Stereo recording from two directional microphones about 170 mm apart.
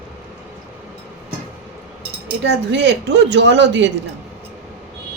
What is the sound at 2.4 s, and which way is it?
Speech, 90° right.